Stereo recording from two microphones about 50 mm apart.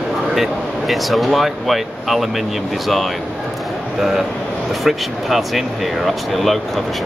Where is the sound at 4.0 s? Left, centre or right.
Centre.